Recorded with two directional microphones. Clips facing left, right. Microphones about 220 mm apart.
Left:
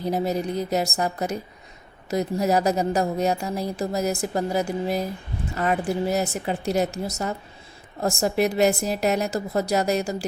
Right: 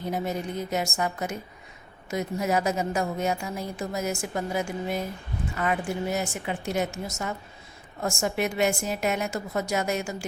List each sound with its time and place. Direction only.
0.0 s a woman's voice: 35° left (ahead or behind)